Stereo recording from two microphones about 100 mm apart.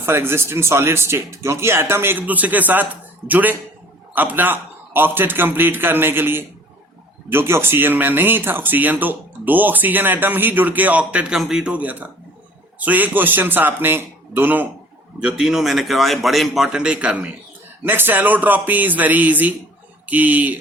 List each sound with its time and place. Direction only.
0.0 s a man's voice: 25° right (ahead or behind)